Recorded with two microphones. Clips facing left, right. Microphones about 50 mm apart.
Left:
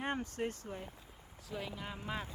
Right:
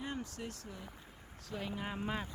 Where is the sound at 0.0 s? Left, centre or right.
Left.